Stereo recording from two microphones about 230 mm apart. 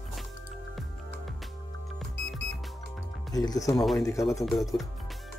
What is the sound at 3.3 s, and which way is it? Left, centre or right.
Speech, centre.